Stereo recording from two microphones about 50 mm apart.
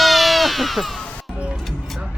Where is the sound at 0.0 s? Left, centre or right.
Centre.